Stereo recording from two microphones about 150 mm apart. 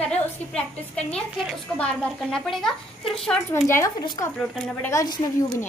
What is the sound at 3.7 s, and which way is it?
Speech, 25° left (ahead or behind).